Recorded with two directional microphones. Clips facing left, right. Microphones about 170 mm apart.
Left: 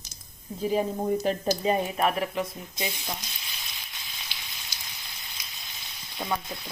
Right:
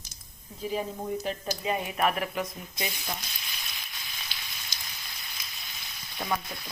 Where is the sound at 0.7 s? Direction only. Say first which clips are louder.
Left 6 dB; 40° left (ahead or behind); by 2.9 s 25° left (ahead or behind).